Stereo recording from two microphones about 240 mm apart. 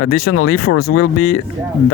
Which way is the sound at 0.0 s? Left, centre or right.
Left.